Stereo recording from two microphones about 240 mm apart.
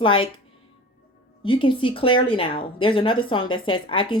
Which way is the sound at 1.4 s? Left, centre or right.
Left.